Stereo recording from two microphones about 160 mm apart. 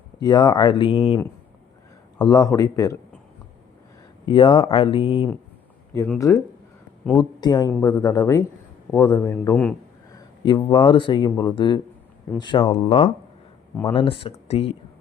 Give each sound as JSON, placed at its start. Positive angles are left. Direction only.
{"t": 0.2, "sound": "speech", "side_deg": 25}
{"t": 2.1, "sound": "speech", "side_deg": 25}
{"t": 4.3, "sound": "speech", "side_deg": 30}
{"t": 6.1, "sound": "speech", "side_deg": 20}
{"t": 10.2, "sound": "a sound", "side_deg": 30}
{"t": 10.7, "sound": "speech", "side_deg": 35}
{"t": 13.8, "sound": "speech", "side_deg": 35}